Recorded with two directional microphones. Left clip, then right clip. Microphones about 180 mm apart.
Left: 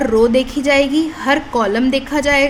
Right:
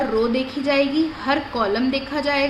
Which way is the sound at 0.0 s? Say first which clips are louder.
Left 8 dB; 55° left (ahead or behind).